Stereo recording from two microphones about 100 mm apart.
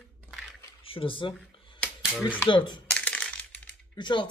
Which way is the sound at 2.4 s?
50° left (ahead or behind).